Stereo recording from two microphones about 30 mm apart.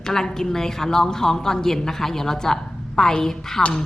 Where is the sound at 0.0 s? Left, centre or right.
Centre.